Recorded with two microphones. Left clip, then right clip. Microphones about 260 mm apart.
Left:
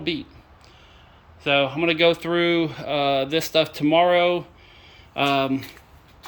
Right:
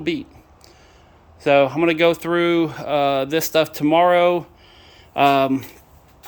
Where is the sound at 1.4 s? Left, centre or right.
Centre.